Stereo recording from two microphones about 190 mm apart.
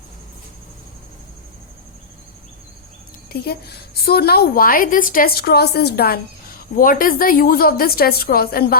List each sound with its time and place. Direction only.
3.3 s a woman's voice: 55° left (ahead or behind)